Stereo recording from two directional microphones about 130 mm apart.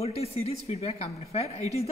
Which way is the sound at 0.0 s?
50° left (ahead or behind).